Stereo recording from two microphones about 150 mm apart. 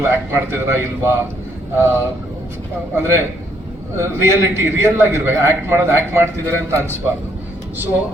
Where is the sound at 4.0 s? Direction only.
15° right (ahead or behind).